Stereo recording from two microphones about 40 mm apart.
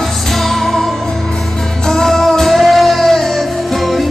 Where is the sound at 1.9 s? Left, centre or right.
Centre.